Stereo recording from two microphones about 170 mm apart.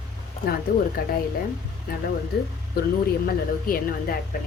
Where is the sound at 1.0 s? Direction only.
60° left (ahead or behind).